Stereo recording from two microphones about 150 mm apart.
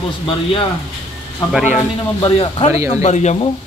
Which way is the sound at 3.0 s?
50° left (ahead or behind).